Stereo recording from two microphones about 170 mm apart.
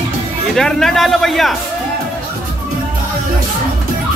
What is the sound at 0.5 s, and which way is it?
A man's voice, centre (ahead or behind).